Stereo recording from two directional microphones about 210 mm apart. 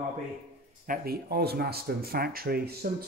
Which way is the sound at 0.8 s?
45° right (ahead or behind).